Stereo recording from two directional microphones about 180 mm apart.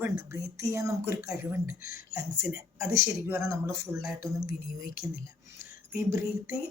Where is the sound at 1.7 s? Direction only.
55° left (ahead or behind).